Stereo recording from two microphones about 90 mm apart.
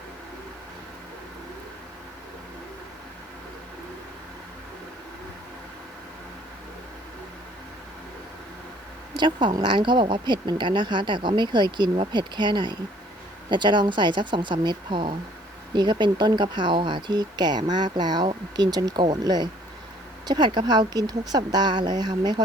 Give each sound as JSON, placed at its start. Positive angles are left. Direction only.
{"t": 9.1, "sound": "speech", "side_deg": -60}